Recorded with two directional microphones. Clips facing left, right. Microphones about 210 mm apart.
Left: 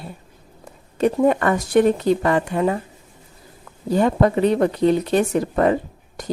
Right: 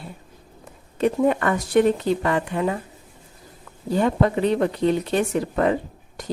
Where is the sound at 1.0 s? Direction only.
40° left (ahead or behind).